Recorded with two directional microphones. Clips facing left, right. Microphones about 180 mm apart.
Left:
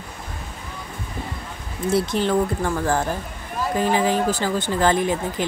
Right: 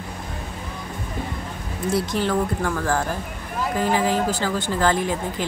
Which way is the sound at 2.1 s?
20° left (ahead or behind).